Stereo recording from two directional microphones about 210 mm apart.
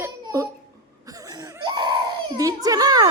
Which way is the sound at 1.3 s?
20° right (ahead or behind).